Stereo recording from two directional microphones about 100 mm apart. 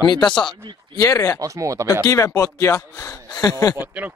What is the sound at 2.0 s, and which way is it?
Speech, 35° left (ahead or behind).